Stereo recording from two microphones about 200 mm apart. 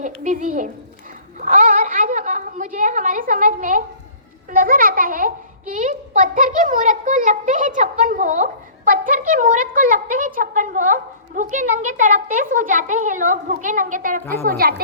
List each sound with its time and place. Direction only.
0.0 s a child's voice: 40° right (ahead or behind)
1.4 s a sound: 40° right (ahead or behind)
4.5 s a child's voice: 45° right (ahead or behind)